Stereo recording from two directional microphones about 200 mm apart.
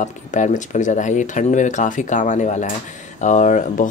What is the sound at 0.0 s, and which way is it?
Speech, 40° left (ahead or behind).